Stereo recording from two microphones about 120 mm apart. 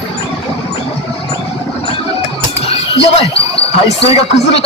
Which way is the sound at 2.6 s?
55° left (ahead or behind).